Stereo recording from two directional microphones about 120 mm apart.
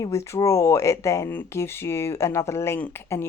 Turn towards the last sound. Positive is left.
turn(degrees=20)  # may be behind; listen again after turning